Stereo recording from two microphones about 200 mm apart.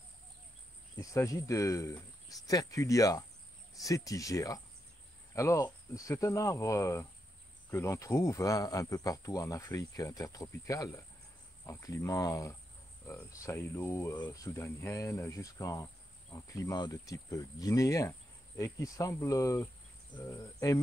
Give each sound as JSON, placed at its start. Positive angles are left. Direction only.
{"t": 0.9, "sound": "speech", "side_deg": 15}